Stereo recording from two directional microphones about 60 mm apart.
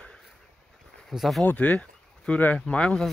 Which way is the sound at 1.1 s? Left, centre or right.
Centre.